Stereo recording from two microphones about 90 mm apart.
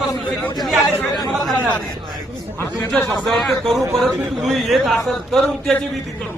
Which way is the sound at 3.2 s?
Centre (ahead or behind).